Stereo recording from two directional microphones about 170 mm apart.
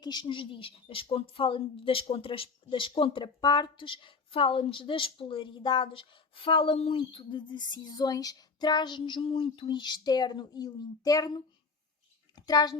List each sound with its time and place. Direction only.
0.0 s speech: 25° left (ahead or behind)
12.5 s speech: 25° left (ahead or behind)